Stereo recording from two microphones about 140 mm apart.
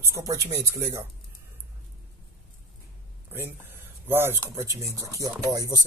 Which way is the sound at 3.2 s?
20° right (ahead or behind).